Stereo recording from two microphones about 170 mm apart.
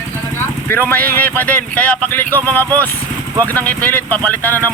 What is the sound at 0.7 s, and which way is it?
Speech, 10° left (ahead or behind).